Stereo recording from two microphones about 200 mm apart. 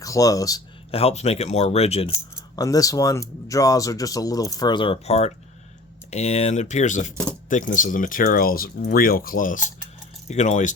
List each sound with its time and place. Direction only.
0.0 s speech: 15° left (ahead or behind)
0.9 s speech: 30° left (ahead or behind)
2.3 s speech: 15° left (ahead or behind); by 10.8 s 35° left (ahead or behind)